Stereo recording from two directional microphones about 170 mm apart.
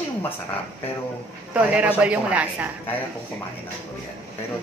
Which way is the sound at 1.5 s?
5° right (ahead or behind).